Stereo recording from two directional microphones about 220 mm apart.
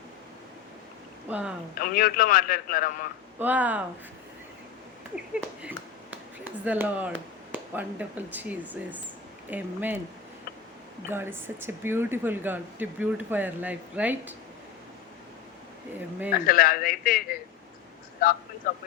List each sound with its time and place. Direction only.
1.3 s speech: 5° right (ahead or behind)
1.8 s a man's voice: 40° left (ahead or behind)
3.3 s speech: 10° right (ahead or behind)
5.1 s speech: 5° right (ahead or behind)
11.1 s speech: 10° right (ahead or behind)
16.3 s a man's voice: 40° left (ahead or behind)
18.6 s a man's voice: 40° left (ahead or behind)